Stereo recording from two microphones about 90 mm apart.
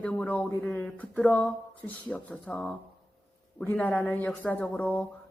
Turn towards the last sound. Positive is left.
turn(degrees=20)  # may be behind; listen again after turning